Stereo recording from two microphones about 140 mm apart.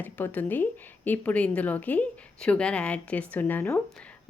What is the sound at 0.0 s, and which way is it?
A woman's voice, 10° left (ahead or behind).